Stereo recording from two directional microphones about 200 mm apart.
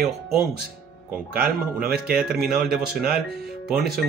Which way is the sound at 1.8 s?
50° right (ahead or behind).